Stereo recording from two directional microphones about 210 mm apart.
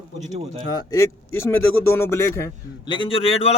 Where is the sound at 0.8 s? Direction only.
15° left (ahead or behind).